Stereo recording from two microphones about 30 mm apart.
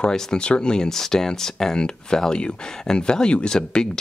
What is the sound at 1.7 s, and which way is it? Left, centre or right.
Speech, left.